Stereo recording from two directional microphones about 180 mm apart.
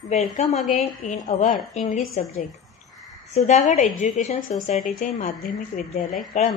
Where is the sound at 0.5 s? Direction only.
Centre (ahead or behind).